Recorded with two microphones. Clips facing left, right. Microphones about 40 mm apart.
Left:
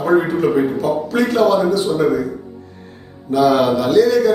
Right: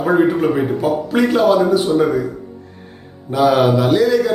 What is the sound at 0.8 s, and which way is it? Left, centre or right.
Speech, centre.